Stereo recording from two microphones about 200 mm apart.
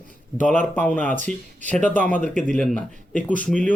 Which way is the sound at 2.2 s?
40° right (ahead or behind).